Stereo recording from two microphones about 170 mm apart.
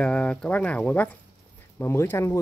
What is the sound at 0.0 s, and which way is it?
Speech, 5° left (ahead or behind).